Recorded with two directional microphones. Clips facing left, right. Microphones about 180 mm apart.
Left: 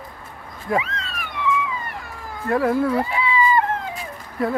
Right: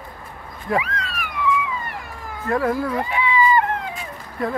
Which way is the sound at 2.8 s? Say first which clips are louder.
Left 2 dB; 30° left (ahead or behind).